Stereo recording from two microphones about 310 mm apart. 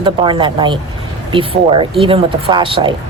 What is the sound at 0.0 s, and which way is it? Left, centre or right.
A woman's voice, centre.